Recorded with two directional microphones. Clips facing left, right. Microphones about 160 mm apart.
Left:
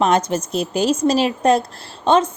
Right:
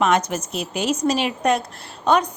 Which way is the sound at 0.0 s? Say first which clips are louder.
Left 2 dB; 30° left (ahead or behind).